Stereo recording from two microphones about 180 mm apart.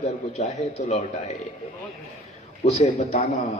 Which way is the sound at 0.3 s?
40° left (ahead or behind).